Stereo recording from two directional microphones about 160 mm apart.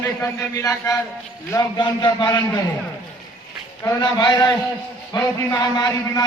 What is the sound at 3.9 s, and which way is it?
A man's voice, 25° left (ahead or behind).